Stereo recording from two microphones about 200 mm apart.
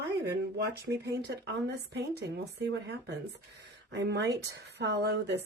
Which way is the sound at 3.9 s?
60° right (ahead or behind).